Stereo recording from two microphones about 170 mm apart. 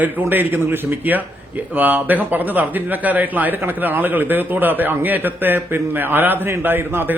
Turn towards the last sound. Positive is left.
turn(degrees=-10)  # may be behind; listen again after turning